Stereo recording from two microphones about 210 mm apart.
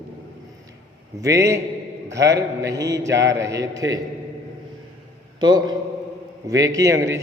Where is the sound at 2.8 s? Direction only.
15° right (ahead or behind).